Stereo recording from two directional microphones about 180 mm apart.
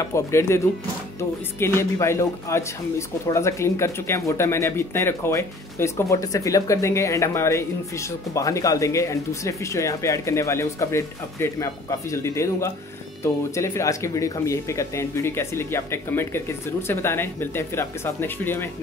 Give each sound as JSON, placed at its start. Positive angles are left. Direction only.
{"t": 0.0, "sound": "speech", "side_deg": 15}
{"t": 1.6, "sound": "speech", "side_deg": 15}